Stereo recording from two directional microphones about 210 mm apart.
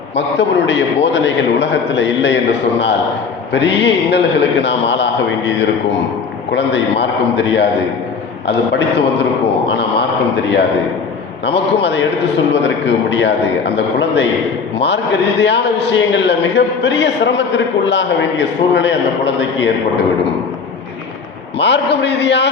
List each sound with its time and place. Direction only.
0.2 s a man's voice: 60° left (ahead or behind)
9.6 s a sound: 55° left (ahead or behind)
11.4 s a man's voice: 55° left (ahead or behind)
21.6 s a man's voice: 55° left (ahead or behind)